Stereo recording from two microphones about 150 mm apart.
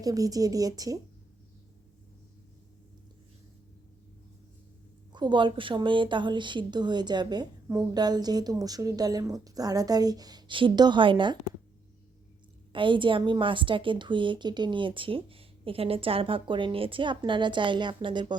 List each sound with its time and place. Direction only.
0.0 s a woman's voice: 25° right (ahead or behind)
5.1 s a woman's voice: 30° right (ahead or behind)
12.7 s a woman's voice: 35° right (ahead or behind)